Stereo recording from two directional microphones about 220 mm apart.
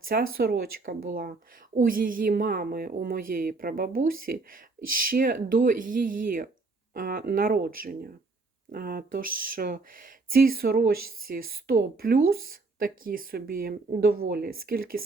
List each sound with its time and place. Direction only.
0.1 s a woman's voice: 40° right (ahead or behind)